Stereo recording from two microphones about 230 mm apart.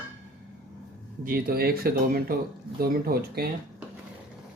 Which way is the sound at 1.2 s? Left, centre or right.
Right.